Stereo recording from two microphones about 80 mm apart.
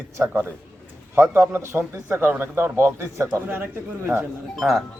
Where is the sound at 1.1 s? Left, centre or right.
Right.